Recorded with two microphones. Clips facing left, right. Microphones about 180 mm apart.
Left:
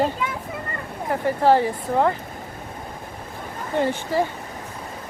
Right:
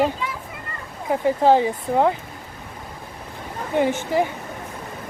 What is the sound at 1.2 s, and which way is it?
Speech, 15° right (ahead or behind).